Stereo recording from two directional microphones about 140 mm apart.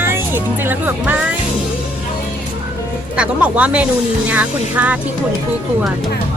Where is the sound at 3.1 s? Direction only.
10° right (ahead or behind).